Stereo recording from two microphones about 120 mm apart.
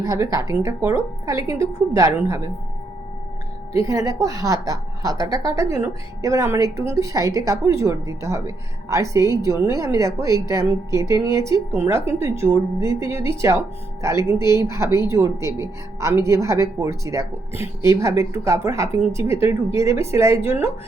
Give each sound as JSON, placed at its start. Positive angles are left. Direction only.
{"t": 0.0, "sound": "a woman's voice", "side_deg": -25}
{"t": 3.8, "sound": "a woman's voice", "side_deg": -25}